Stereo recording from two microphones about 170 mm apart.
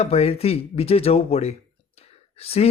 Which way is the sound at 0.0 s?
35° left (ahead or behind).